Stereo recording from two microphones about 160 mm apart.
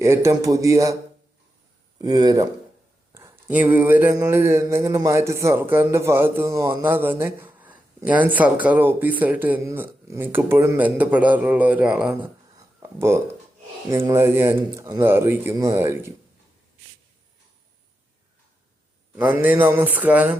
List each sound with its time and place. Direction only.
0.0 s a man's voice: 20° right (ahead or behind)
2.0 s a man's voice: 25° right (ahead or behind); by 12.1 s 5° right (ahead or behind)
12.8 s a man's voice: 15° right (ahead or behind)
19.1 s a man's voice: 15° right (ahead or behind)